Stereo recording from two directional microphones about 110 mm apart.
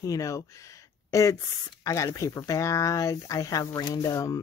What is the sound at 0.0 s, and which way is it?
Speech, 30° left (ahead or behind).